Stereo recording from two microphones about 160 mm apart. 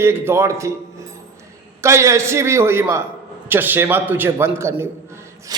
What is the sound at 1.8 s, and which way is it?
Speech, 20° right (ahead or behind).